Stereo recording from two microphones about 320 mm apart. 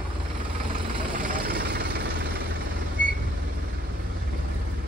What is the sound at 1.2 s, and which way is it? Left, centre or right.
Vehicle, right.